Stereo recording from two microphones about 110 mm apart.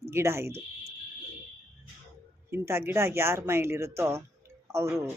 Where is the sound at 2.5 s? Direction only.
25° right (ahead or behind).